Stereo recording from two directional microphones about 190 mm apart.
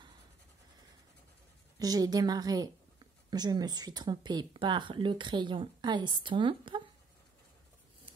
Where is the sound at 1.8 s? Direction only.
20° right (ahead or behind).